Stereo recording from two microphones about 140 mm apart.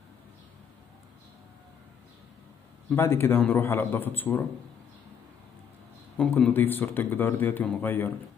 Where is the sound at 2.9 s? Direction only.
15° left (ahead or behind).